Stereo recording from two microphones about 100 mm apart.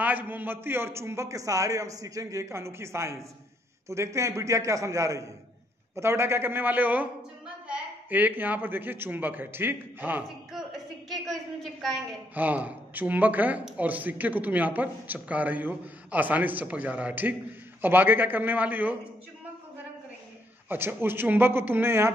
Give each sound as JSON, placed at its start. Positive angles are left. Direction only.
{"t": 0.0, "sound": "a man's voice", "side_deg": -20}
{"t": 12.4, "sound": "a man's voice", "side_deg": -15}
{"t": 20.6, "sound": "a man's voice", "side_deg": -20}